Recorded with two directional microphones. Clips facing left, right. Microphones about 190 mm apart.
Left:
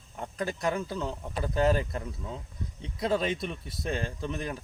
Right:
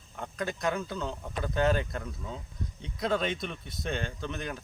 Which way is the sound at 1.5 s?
5° left (ahead or behind).